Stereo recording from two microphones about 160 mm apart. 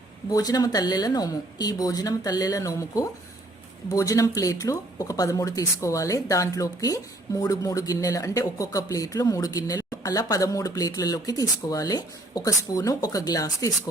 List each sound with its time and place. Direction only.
0.3 s speech: 20° left (ahead or behind)